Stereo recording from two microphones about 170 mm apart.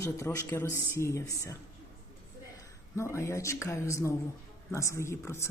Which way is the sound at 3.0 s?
15° left (ahead or behind).